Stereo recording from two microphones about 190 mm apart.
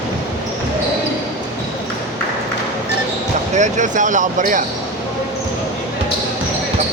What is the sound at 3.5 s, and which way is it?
Speech, 40° right (ahead or behind).